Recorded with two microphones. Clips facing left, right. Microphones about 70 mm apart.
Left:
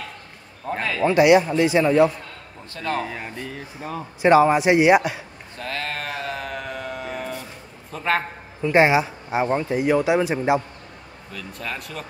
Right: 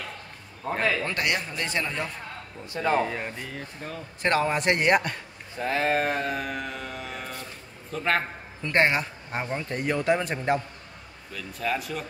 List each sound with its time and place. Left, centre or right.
0.7 s speech: centre
1.0 s speech: centre
2.7 s speech: centre
3.0 s speech: centre
5.6 s speech: centre
6.1 s a sound: centre
7.9 s a man's voice: centre
11.3 s speech: centre